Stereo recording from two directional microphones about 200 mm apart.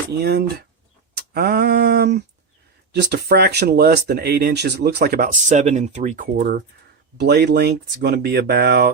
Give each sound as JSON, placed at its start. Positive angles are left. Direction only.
{"t": 0.1, "sound": "speech", "side_deg": -55}
{"t": 6.3, "sound": "speech", "side_deg": -50}